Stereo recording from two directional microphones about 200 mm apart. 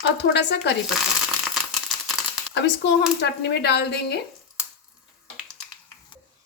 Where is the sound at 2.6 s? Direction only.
60° left (ahead or behind).